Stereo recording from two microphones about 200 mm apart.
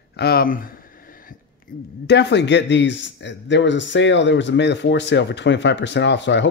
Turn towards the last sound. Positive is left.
turn(degrees=60)  # may be behind; listen again after turning